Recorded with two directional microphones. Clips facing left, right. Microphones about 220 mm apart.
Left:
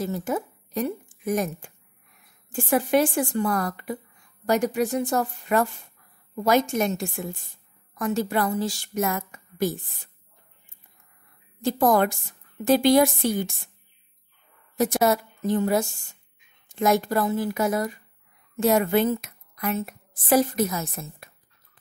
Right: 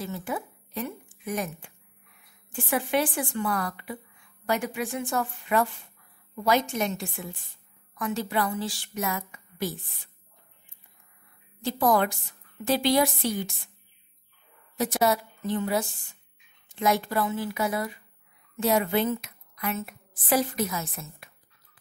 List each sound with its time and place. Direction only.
0.0 s a woman's voice: 40° left (ahead or behind)
11.6 s a woman's voice: 45° left (ahead or behind)
14.8 s a woman's voice: 45° left (ahead or behind)